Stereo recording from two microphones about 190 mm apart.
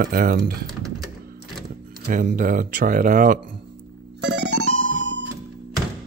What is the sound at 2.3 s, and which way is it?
Speech, 45° right (ahead or behind).